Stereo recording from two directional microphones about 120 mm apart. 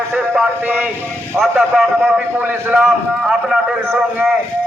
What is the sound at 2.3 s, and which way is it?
Speech, 15° right (ahead or behind).